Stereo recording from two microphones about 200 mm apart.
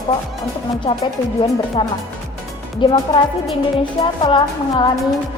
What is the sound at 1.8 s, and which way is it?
A woman's voice, 25° left (ahead or behind).